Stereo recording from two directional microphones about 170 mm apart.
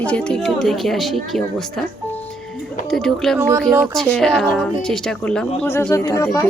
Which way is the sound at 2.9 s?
Centre (ahead or behind).